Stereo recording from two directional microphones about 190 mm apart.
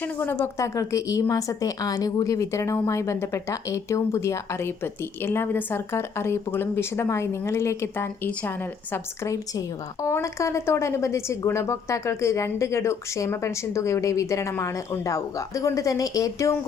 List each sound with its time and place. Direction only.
0.0 s a woman's voice: 10° left (ahead or behind)